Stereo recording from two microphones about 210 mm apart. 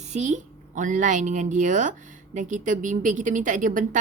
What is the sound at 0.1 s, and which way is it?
A woman's voice, 35° right (ahead or behind).